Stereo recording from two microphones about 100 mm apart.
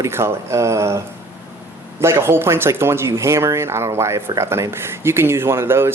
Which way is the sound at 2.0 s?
25° right (ahead or behind).